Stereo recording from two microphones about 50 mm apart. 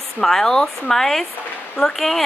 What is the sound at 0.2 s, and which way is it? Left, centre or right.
A woman's voice, centre.